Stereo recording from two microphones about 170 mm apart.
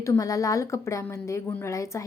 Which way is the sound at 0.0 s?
20° left (ahead or behind).